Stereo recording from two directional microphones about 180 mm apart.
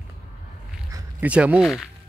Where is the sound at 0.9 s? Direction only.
10° right (ahead or behind).